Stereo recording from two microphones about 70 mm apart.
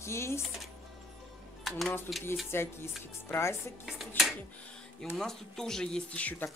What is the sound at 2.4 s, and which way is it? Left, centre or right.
Speech, left.